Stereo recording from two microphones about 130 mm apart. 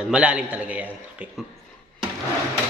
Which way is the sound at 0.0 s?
10° right (ahead or behind).